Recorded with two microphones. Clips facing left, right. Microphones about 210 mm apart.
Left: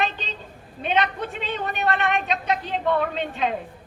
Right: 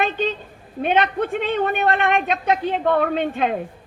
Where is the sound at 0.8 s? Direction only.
55° right (ahead or behind).